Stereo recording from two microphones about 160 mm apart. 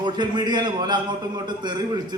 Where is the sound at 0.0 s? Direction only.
25° right (ahead or behind).